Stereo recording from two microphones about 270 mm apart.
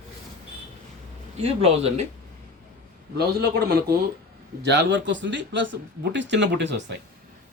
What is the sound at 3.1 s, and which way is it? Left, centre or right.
Speech, right.